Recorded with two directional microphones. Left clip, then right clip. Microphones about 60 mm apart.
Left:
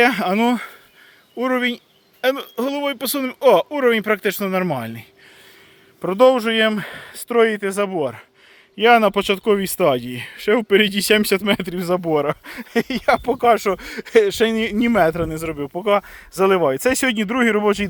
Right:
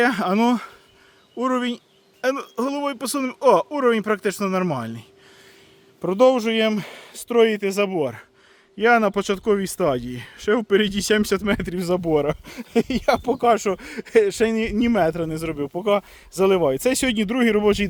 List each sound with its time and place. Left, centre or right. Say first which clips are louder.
0.2 s speech: left 2 dB; right
1.4 s speech: left 3 dB; centre
6.1 s speech: left 3 dB; right
7.3 s speech: left 1 dB; right
7.5 s speech: left 1 dB; right
8.7 s speech: left 4 dB; centre
11.8 s speech: left 2 dB; right
12.1 s speech: left 1 dB; right
12.8 s speech: left 3 dB; right
13.2 s speech: left 2 dB; centre
13.5 s speech: left 4 dB; centre
17.2 s speech: left 2 dB; right